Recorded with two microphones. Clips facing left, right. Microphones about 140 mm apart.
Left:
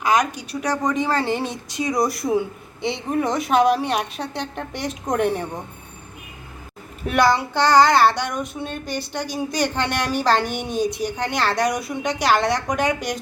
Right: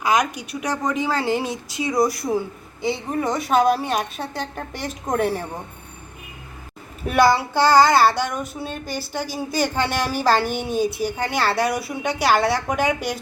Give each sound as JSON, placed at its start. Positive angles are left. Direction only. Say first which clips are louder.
{"t": 0.0, "sound": "a child's voice", "louder": "left 1 dB", "side_deg": -10}
{"t": 7.0, "sound": "a child's voice", "louder": "right 1 dB", "side_deg": -5}